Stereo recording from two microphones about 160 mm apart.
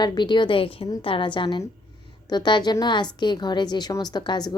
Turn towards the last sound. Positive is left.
turn(degrees=25)  # may be behind; listen again after turning